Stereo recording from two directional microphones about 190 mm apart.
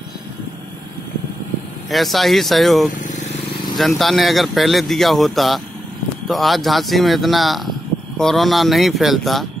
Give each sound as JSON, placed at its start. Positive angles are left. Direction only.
{"t": 1.9, "sound": "speech", "side_deg": 0}
{"t": 2.9, "sound": "vehicle", "side_deg": 45}
{"t": 3.7, "sound": "speech", "side_deg": 0}